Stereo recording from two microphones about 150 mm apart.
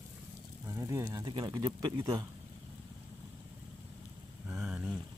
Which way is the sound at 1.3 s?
30° right (ahead or behind).